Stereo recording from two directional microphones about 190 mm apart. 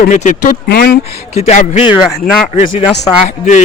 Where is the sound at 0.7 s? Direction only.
55° left (ahead or behind).